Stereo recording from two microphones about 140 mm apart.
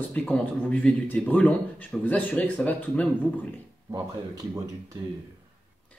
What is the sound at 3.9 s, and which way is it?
Speech, 25° right (ahead or behind).